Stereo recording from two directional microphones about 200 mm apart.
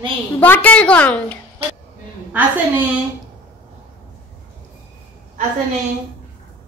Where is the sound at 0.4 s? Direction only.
10° left (ahead or behind).